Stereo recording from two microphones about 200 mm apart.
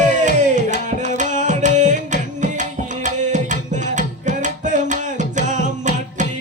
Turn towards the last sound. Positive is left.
turn(degrees=-35)  # may be behind; listen again after turning